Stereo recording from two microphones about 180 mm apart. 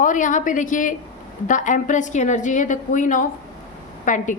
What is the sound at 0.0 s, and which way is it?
A woman's voice, 45° left (ahead or behind).